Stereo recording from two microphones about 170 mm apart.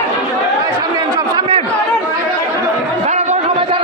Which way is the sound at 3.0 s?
40° right (ahead or behind).